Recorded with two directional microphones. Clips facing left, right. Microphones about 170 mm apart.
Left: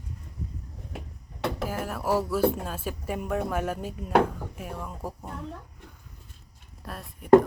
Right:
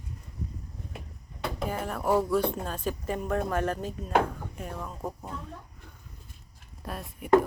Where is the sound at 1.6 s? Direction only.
5° left (ahead or behind).